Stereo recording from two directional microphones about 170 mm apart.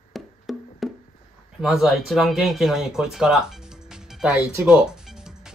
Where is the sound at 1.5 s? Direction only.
Centre (ahead or behind).